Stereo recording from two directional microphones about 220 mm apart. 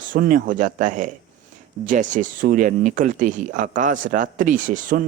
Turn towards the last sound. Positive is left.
turn(degrees=-35)  # may be behind; listen again after turning